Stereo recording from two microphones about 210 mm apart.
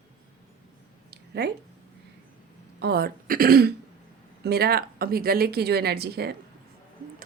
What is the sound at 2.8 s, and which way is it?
A woman's voice, 50° right (ahead or behind).